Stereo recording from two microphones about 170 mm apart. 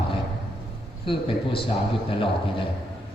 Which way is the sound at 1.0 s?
30° left (ahead or behind).